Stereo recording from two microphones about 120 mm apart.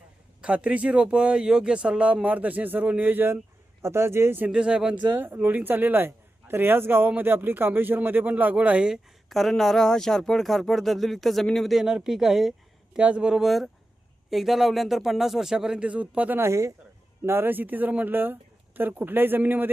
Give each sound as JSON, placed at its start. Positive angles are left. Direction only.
{"t": 0.4, "sound": "speech", "side_deg": -10}
{"t": 5.1, "sound": "speech", "side_deg": -20}